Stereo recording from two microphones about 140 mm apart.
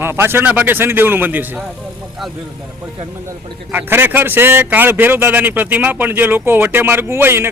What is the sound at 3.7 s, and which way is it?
Speech, 15° right (ahead or behind).